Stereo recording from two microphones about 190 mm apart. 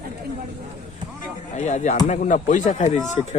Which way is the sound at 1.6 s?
40° left (ahead or behind).